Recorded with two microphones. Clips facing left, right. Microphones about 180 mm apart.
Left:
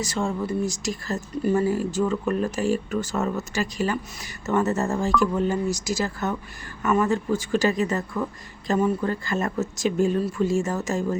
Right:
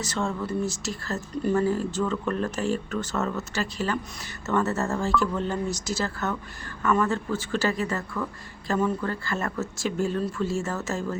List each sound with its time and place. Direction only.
0.0 s speech: 10° left (ahead or behind)